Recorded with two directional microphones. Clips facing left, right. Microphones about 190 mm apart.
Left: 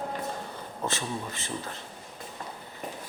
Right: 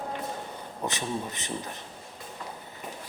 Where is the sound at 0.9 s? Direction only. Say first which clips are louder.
Right 1 dB; 20° right (ahead or behind).